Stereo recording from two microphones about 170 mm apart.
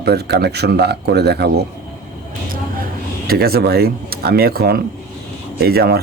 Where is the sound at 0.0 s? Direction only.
70° right (ahead or behind).